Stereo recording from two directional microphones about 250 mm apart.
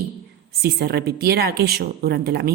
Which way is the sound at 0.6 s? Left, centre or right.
Right.